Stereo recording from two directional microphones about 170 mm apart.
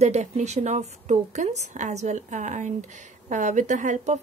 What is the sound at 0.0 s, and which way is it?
A woman's voice, 40° right (ahead or behind).